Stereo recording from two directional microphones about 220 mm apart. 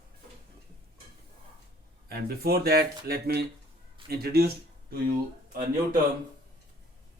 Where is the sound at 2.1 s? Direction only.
45° right (ahead or behind).